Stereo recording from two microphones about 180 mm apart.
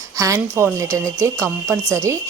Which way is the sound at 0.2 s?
15° right (ahead or behind).